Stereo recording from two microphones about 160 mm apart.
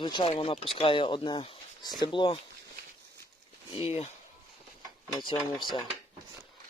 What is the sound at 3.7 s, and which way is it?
Speech, 40° left (ahead or behind).